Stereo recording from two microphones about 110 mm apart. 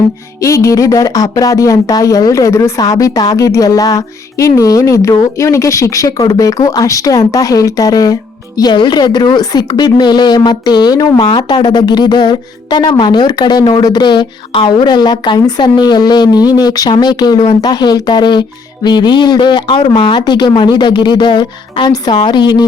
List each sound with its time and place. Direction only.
0.4 s speech: 30° left (ahead or behind)